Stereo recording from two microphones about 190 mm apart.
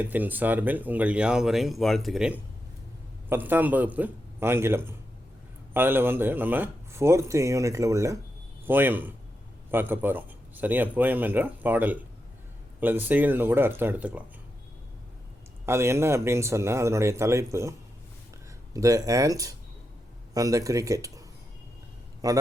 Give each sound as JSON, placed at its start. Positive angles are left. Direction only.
{"t": 0.0, "sound": "speech", "side_deg": -10}
{"t": 15.6, "sound": "a man's voice", "side_deg": -15}